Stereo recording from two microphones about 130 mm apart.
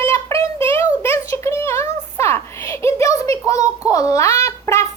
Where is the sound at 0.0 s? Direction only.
20° left (ahead or behind).